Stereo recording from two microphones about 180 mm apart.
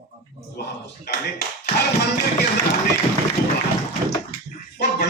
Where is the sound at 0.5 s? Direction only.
60° left (ahead or behind).